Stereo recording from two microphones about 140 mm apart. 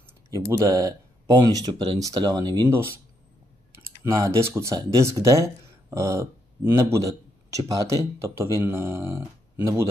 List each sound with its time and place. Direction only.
0.0 s speech: 20° right (ahead or behind)
4.0 s speech: 20° right (ahead or behind)